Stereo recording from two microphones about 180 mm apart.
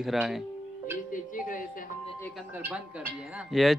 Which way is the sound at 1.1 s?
50° left (ahead or behind).